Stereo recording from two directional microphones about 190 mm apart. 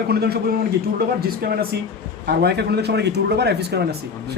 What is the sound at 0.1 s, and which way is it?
A woman's voice, 55° right (ahead or behind).